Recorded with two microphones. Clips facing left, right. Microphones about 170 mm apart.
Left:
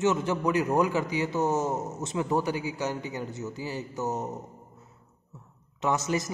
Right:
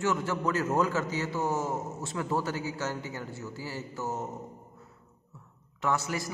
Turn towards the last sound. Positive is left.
turn(degrees=20)  # may be behind; listen again after turning